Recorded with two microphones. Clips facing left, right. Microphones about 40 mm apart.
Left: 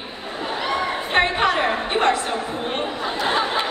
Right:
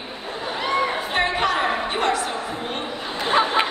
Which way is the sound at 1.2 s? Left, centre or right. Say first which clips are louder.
Left 3 dB; left.